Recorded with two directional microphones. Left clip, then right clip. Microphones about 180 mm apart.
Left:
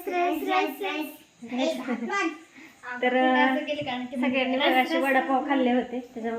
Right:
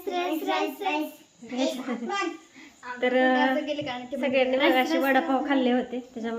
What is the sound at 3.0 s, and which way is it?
Speech, centre (ahead or behind).